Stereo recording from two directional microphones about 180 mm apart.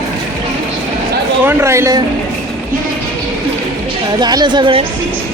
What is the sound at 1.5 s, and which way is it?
Speech, 15° right (ahead or behind).